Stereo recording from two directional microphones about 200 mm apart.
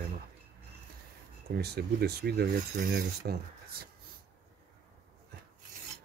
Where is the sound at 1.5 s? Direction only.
55° right (ahead or behind).